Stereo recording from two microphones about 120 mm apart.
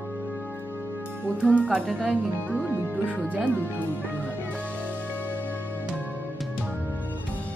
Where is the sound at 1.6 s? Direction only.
10° right (ahead or behind).